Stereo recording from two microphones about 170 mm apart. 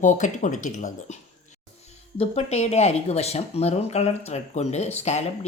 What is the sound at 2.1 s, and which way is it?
Speech, 40° left (ahead or behind).